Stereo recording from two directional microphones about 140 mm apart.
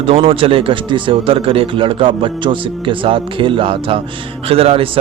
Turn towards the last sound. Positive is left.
turn(degrees=-45)  # may be behind; listen again after turning